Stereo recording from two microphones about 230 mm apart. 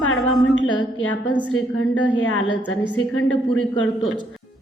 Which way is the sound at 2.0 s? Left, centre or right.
Left.